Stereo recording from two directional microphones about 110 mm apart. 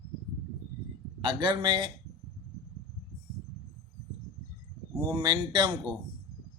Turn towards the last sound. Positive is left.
turn(degrees=-40)  # may be behind; listen again after turning